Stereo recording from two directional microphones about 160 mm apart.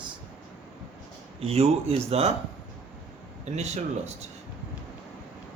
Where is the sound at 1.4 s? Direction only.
40° right (ahead or behind).